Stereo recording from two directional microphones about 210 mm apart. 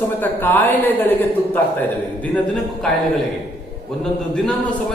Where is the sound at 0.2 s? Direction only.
10° left (ahead or behind).